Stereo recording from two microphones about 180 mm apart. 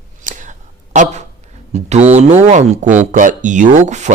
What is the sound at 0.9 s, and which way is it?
Speech, 45° right (ahead or behind).